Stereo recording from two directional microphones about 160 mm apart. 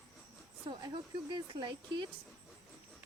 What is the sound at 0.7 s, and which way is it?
Speech, 30° right (ahead or behind).